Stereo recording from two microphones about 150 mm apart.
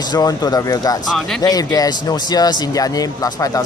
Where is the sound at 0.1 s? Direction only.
25° left (ahead or behind).